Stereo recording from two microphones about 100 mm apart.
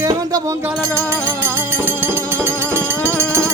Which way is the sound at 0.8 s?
25° right (ahead or behind).